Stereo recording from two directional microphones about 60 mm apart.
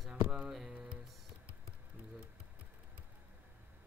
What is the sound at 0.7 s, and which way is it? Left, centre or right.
Music, centre.